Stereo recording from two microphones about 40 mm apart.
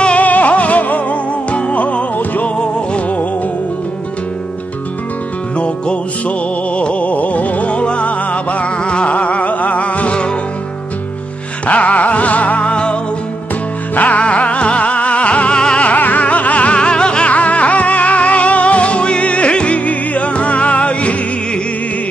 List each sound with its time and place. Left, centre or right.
0.0 s music: left
5.6 s music: left
11.6 s music: left
13.9 s music: left
15.8 s music: left
17.3 s music: left